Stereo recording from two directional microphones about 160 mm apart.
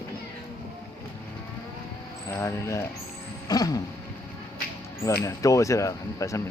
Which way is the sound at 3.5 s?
25° left (ahead or behind).